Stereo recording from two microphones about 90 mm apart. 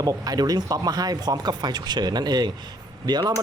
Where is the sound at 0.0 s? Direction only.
45° right (ahead or behind).